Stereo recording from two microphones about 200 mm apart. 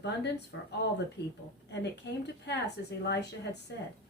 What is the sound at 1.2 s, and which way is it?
Speech, 55° left (ahead or behind).